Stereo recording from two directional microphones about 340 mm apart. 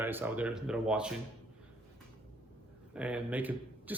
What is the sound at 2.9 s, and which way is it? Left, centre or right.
Speech, centre.